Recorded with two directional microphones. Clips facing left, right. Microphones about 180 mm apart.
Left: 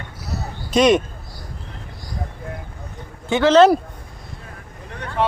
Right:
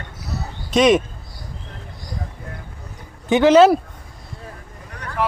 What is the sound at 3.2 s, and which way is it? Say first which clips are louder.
Speech: right 1 dB; 15° right (ahead or behind).